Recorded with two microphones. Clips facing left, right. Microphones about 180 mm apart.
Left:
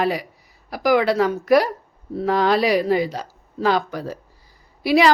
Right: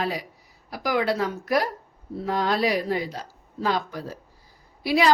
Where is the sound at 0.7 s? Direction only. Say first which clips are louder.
Left 6 dB; 80° left.